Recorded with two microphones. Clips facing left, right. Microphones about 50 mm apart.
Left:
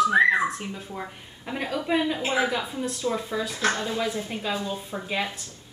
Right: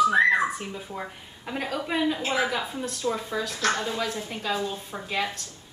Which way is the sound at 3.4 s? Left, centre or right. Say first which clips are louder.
Right 1 dB; centre.